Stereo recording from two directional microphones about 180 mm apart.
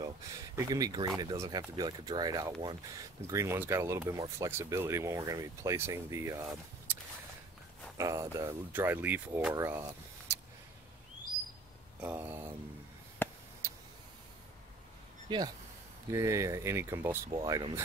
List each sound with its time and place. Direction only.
0.6 s speech: 20° right (ahead or behind)
8.0 s speech: 20° right (ahead or behind)
12.0 s speech: 10° right (ahead or behind)
13.2 s a sound: 10° left (ahead or behind)
15.2 s speech: 25° right (ahead or behind)
17.3 s speech: 25° right (ahead or behind)